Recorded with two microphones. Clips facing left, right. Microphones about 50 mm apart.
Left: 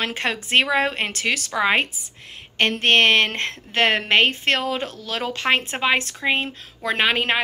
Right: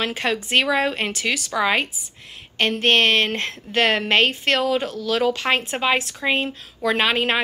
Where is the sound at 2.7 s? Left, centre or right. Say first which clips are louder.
Left 1 dB; left.